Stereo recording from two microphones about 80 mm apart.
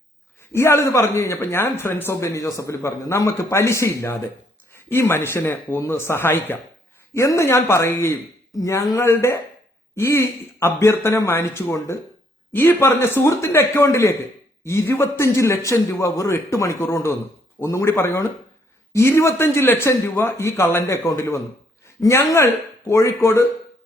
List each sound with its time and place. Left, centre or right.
0.5 s a man's voice: left
2.2 s a man's voice: left
8.5 s a man's voice: left
9.0 s a man's voice: left